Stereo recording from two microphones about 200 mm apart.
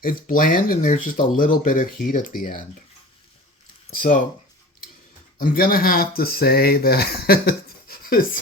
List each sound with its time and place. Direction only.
0.3 s speech: 45° left (ahead or behind)
3.8 s speech: 40° left (ahead or behind)
5.4 s speech: 45° left (ahead or behind)